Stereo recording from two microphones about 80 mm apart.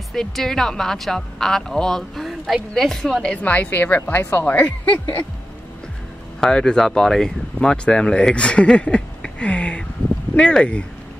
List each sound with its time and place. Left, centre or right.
0.1 s a woman's voice: centre; by 4.5 s left
4.5 s speech: left
6.4 s speech: centre